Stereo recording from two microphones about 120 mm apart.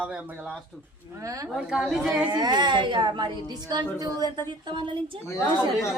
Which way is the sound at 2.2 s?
35° right (ahead or behind).